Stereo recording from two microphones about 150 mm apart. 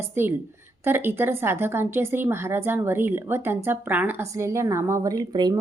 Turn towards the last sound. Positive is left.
turn(degrees=-25)  # may be behind; listen again after turning